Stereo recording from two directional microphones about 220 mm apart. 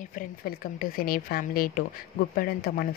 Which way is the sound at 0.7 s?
40° left (ahead or behind).